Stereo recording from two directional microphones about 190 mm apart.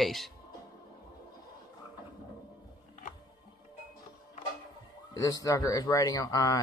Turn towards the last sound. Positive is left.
turn(degrees=15)  # may be behind; listen again after turning